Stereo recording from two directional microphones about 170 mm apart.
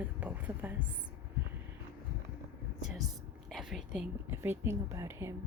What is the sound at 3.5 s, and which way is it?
A woman's voice, centre (ahead or behind).